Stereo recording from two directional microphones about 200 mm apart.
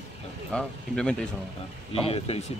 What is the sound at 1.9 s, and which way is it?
Speech, 30° left (ahead or behind).